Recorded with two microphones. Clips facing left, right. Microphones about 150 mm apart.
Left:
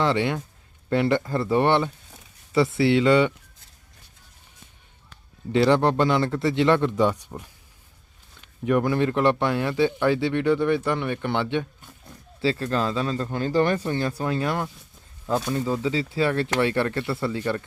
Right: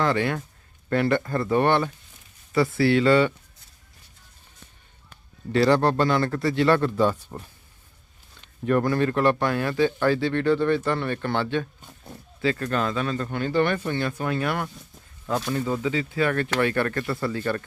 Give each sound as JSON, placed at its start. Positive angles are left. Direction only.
{"t": 0.0, "sound": "speech", "side_deg": 20}
{"t": 5.5, "sound": "a man's voice", "side_deg": 20}
{"t": 8.4, "sound": "a man's voice", "side_deg": 10}
{"t": 15.8, "sound": "speech", "side_deg": 30}